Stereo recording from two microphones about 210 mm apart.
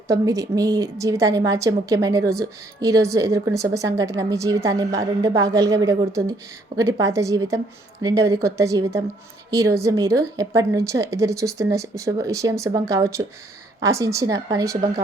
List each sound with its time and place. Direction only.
0.1 s a woman's voice: 15° right (ahead or behind)